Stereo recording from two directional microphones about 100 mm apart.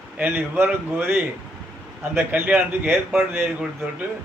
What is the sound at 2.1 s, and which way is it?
Speech, 20° right (ahead or behind).